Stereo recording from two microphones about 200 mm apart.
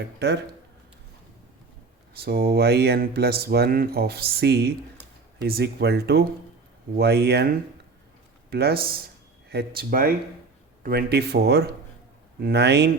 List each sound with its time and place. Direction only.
0.2 s speech: 55° right (ahead or behind)
2.1 s speech: 50° right (ahead or behind)
8.4 s speech: 50° right (ahead or behind)